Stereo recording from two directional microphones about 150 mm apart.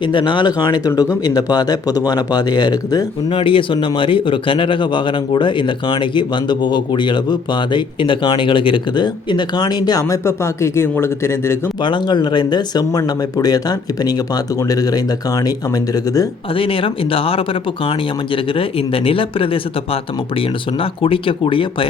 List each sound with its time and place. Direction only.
0.0 s speech: 30° left (ahead or behind)
11.8 s speech: 30° left (ahead or behind)
16.6 s speech: 35° left (ahead or behind)